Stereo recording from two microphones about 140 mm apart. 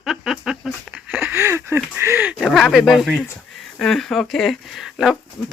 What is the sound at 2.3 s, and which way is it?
Speech, centre (ahead or behind).